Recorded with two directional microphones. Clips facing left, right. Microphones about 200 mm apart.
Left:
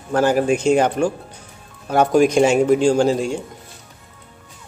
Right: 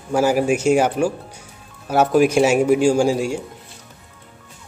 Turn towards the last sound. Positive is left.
turn(degrees=-10)  # may be behind; listen again after turning